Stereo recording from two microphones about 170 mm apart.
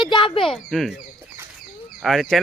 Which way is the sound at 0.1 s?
30° left (ahead or behind).